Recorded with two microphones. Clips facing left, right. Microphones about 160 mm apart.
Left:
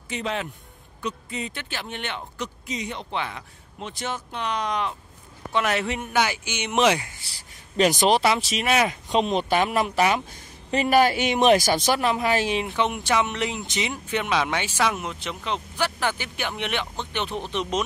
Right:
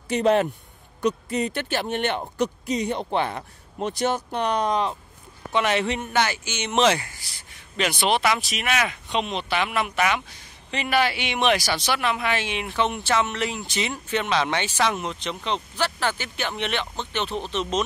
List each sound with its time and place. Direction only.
0.1 s speech: 45° right (ahead or behind)
5.5 s speech: centre (ahead or behind)
7.2 s speech: 35° left (ahead or behind)
9.1 s a man's voice: 40° left (ahead or behind)
12.6 s speech: 15° left (ahead or behind)